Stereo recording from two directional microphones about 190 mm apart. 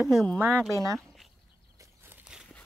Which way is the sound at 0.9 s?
Centre (ahead or behind).